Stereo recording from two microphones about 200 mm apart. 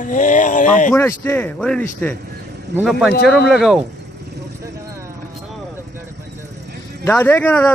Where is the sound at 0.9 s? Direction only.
10° left (ahead or behind).